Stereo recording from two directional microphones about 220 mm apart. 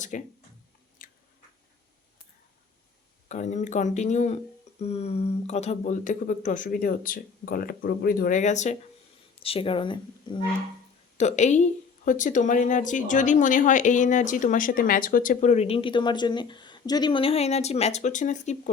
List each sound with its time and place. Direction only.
0.1 s a woman's voice: 35° left (ahead or behind)
1.0 s chewing: 40° left (ahead or behind)
3.2 s a woman's voice: 30° left (ahead or behind)
11.2 s a woman's voice: 30° left (ahead or behind)